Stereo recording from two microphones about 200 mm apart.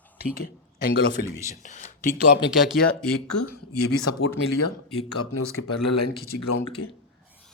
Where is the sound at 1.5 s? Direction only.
35° left (ahead or behind).